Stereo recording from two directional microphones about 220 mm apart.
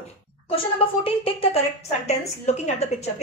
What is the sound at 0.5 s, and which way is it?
A woman's voice, 25° left (ahead or behind).